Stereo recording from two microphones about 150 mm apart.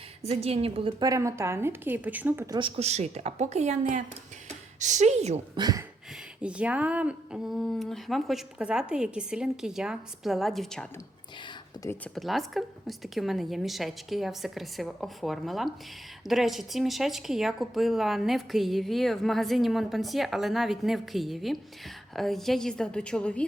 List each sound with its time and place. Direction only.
0.3 s a woman's voice: 40° right (ahead or behind); by 2.5 s 15° right (ahead or behind)
2.5 s a woman's voice: 35° right (ahead or behind); by 4.0 s 50° right (ahead or behind)
4.4 s a sound: 50° right (ahead or behind)
5.5 s speech: 25° right (ahead or behind)
6.4 s speech: 10° right (ahead or behind)
12.1 s speech: centre (ahead or behind)